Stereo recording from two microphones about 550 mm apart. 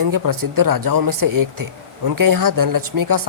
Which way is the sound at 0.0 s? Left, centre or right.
Right.